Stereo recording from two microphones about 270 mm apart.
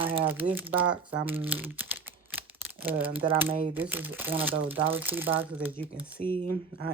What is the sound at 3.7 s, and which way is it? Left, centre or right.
Speech, centre.